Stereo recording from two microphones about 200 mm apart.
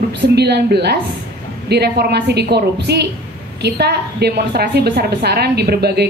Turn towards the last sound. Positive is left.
turn(degrees=-55)  # may be behind; listen again after turning